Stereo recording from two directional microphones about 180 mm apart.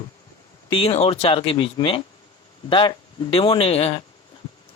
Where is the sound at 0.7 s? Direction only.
30° left (ahead or behind).